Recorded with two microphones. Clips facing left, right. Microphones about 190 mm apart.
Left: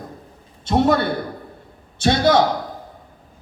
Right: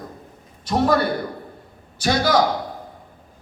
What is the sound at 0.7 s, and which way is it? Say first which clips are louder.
Speech: left 2 dB; 25° left (ahead or behind).